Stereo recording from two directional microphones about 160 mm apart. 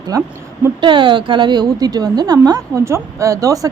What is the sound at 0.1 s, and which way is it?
Speech, 25° right (ahead or behind).